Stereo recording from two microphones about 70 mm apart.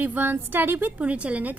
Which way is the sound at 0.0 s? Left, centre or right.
Right.